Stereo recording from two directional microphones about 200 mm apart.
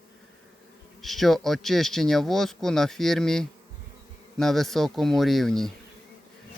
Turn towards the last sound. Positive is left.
turn(degrees=0)  # may be behind; listen again after turning